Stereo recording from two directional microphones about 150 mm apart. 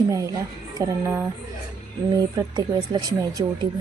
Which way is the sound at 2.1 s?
30° right (ahead or behind).